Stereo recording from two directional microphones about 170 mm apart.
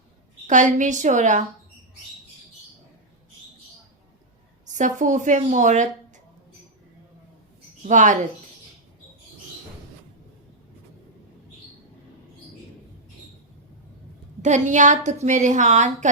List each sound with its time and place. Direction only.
0.4 s a woman's voice: 45° right (ahead or behind)
4.6 s a woman's voice: 50° right (ahead or behind)
7.9 s a woman's voice: 45° right (ahead or behind)
14.4 s a woman's voice: 45° right (ahead or behind)